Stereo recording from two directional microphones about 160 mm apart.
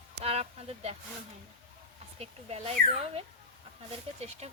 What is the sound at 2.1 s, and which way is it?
Speech, 40° right (ahead or behind).